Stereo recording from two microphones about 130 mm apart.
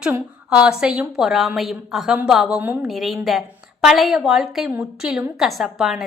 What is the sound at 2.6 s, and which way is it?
Speech, 15° right (ahead or behind).